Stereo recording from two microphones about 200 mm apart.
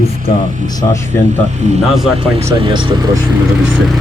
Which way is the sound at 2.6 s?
25° right (ahead or behind).